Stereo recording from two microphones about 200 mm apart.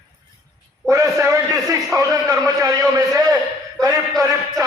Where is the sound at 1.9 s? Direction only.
15° right (ahead or behind).